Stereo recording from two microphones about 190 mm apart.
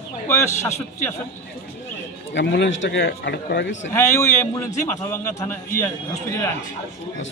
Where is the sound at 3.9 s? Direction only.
15° left (ahead or behind).